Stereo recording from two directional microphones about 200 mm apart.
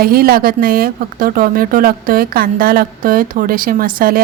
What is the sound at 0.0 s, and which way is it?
A woman's voice, 50° right (ahead or behind).